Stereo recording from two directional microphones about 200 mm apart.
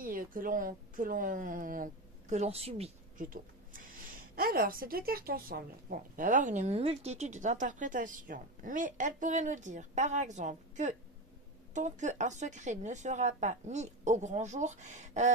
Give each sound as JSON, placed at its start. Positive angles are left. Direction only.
{"t": 0.0, "sound": "a woman's voice", "side_deg": -45}